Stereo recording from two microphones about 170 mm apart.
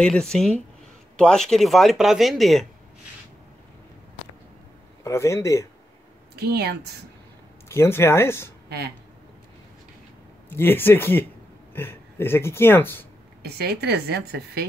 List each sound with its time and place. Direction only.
0.0 s speech: 5° left (ahead or behind)
5.0 s speech: 15° left (ahead or behind)
6.3 s a woman's voice: 70° right (ahead or behind)
7.6 s speech: 15° left (ahead or behind)
8.6 s speech: 75° right (ahead or behind)
10.5 s speech: 10° left (ahead or behind)
13.4 s a woman's voice: 70° right (ahead or behind)